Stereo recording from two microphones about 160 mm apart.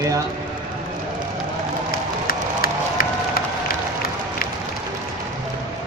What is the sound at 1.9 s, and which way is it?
Crowd, 65° left (ahead or behind).